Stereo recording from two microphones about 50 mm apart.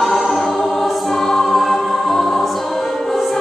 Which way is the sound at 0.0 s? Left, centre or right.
Centre.